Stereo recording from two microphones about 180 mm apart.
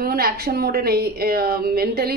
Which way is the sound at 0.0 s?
55° right (ahead or behind).